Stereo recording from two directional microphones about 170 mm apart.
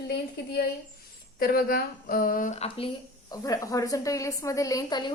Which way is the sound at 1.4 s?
60° left (ahead or behind).